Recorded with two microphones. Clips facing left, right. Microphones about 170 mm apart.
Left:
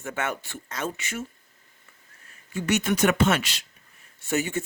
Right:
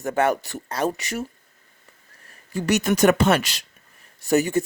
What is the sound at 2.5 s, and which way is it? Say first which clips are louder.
Speech: right 3 dB; 35° right (ahead or behind).